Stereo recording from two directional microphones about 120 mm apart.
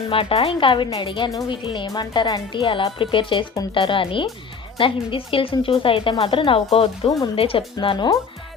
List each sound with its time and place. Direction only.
0.1 s a woman's voice: 50° left (ahead or behind)